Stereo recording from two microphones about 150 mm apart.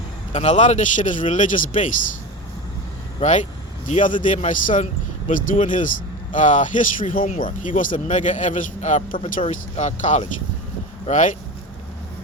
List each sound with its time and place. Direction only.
0.3 s speech: 50° left (ahead or behind)
3.2 s speech: 55° left (ahead or behind)